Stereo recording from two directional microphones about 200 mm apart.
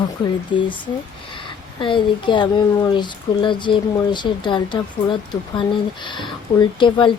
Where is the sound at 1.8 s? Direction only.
25° left (ahead or behind).